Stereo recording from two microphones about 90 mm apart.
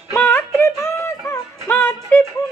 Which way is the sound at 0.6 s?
30° left (ahead or behind).